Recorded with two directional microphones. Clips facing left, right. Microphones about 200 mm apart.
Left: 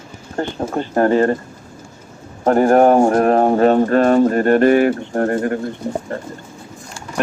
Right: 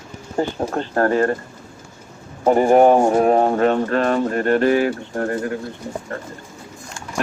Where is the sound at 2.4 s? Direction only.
Centre (ahead or behind).